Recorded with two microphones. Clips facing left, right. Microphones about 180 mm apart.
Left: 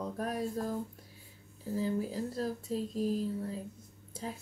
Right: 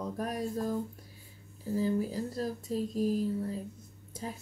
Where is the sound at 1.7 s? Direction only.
Centre (ahead or behind).